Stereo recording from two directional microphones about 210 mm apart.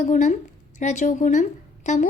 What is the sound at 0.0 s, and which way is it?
A woman's voice, 35° left (ahead or behind).